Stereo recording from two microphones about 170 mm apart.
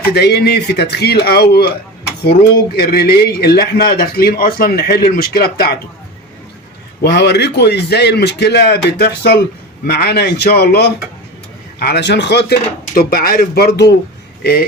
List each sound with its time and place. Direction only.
0.1 s a man's voice: 75° left (ahead or behind)
2.7 s a man's voice: 65° left (ahead or behind)
7.0 s a man's voice: 80° left